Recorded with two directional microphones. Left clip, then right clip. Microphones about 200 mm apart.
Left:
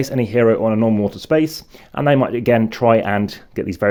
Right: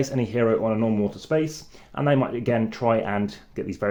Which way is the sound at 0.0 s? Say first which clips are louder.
Left 8 dB; 35° left (ahead or behind).